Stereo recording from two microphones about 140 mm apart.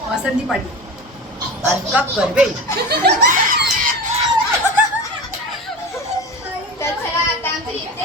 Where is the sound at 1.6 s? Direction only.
10° right (ahead or behind).